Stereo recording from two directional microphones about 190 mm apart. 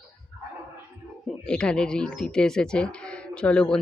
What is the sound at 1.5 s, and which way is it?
Speech, 5° left (ahead or behind).